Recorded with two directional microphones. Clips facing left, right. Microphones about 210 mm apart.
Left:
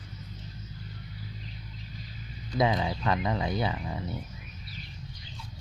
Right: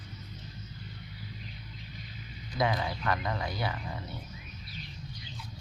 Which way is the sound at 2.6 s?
20° left (ahead or behind).